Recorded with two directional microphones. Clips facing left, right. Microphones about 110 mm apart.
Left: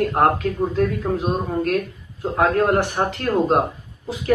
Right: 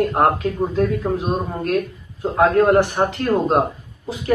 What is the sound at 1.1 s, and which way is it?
Speech, 15° right (ahead or behind).